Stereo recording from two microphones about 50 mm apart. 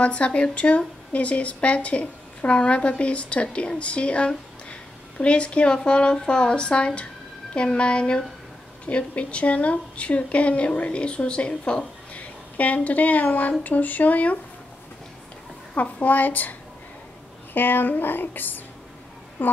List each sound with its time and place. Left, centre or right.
0.0 s a woman's voice: left
15.7 s speech: left
17.6 s speech: left